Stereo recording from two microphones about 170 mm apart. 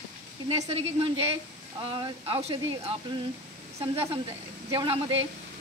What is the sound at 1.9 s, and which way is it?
A woman's voice, 30° right (ahead or behind).